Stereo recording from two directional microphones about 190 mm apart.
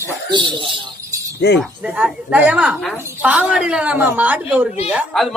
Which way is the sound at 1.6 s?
5° right (ahead or behind).